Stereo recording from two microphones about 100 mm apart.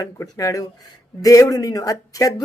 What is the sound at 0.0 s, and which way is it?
Speech, 35° left (ahead or behind).